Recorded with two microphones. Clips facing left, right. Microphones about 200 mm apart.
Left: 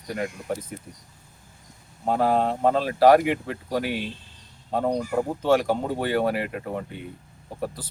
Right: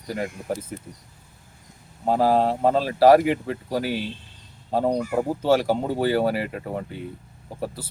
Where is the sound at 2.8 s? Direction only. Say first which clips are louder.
Right 2 dB; centre (ahead or behind).